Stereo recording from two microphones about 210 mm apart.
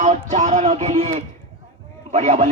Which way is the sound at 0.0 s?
35° right (ahead or behind).